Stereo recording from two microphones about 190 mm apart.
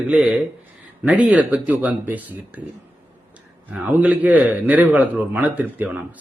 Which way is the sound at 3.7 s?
10° right (ahead or behind).